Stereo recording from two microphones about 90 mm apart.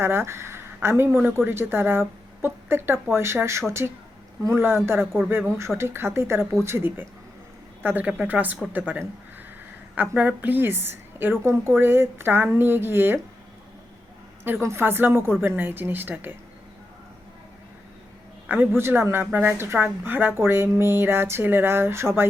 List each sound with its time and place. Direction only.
0.0 s a woman's voice: 25° right (ahead or behind)
14.4 s a woman's voice: 25° right (ahead or behind)
18.4 s a woman's voice: 20° right (ahead or behind)